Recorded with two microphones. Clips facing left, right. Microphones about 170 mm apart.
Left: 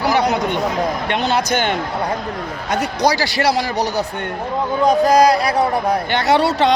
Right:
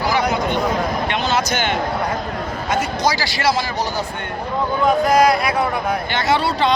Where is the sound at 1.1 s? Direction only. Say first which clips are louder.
Left 3 dB; 60° left (ahead or behind).